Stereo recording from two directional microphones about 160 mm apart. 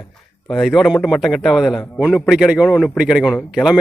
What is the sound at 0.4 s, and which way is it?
A man's voice, centre (ahead or behind).